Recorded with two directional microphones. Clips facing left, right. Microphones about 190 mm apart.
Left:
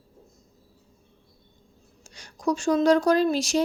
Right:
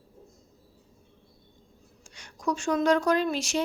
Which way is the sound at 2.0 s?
35° left (ahead or behind).